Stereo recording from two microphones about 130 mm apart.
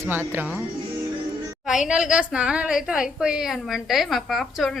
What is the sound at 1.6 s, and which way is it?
A woman's voice, 5° right (ahead or behind).